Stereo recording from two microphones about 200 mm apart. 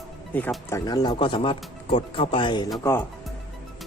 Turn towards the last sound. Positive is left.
turn(degrees=15)  # may be behind; listen again after turning